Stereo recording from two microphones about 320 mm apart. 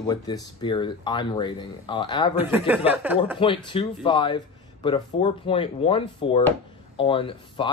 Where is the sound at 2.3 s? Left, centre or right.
Centre.